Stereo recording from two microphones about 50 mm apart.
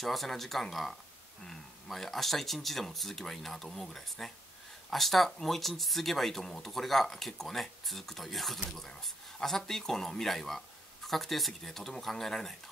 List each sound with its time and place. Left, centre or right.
0.0 s speech: centre